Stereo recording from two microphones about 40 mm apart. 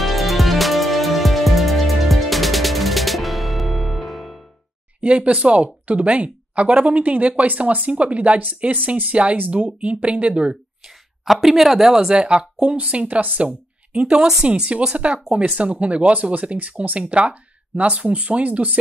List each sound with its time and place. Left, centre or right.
0.0 s music: centre
5.0 s speech: right
9.1 s speech: right
10.8 s a sound: centre
11.4 s speech: centre
12.1 s a woman's voice: right
12.5 s a woman's voice: right
18.4 s speech: right